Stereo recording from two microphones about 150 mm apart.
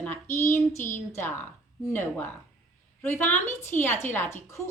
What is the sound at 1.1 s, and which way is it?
A woman's voice, 15° left (ahead or behind).